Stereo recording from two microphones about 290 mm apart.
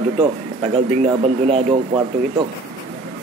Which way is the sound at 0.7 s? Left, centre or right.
Right.